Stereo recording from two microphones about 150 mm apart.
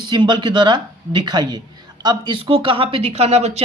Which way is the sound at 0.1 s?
30° right (ahead or behind).